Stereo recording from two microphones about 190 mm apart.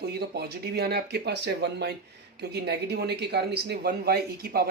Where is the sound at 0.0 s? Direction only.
55° right (ahead or behind).